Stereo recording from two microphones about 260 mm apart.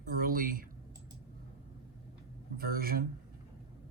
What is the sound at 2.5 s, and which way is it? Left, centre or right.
Speech, right.